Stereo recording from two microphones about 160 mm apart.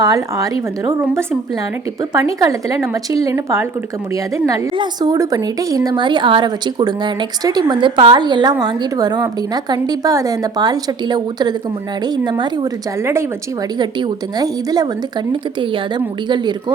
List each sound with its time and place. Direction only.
0.0 s a woman's voice: 20° right (ahead or behind)
2.1 s a woman's voice: 20° right (ahead or behind)
14.3 s a woman's voice: 25° right (ahead or behind)